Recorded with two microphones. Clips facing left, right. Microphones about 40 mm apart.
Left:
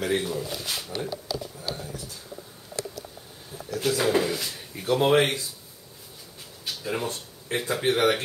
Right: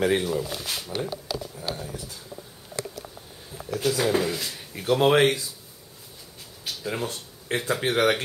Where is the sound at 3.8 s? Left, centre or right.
Centre.